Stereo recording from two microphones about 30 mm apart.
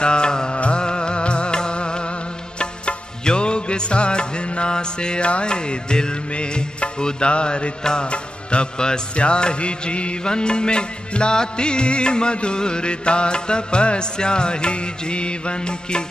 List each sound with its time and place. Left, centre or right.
0.0 s music: left